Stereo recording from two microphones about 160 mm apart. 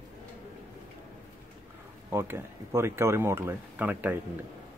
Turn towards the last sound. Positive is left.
turn(degrees=-10)  # may be behind; listen again after turning